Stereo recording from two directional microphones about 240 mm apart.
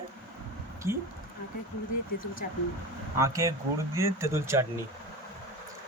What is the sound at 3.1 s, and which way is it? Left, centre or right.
Speech, centre.